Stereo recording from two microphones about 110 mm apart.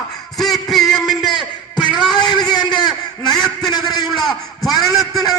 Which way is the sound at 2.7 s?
40° left (ahead or behind).